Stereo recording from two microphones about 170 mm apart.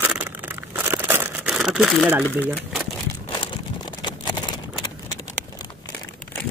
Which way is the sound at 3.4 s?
25° left (ahead or behind).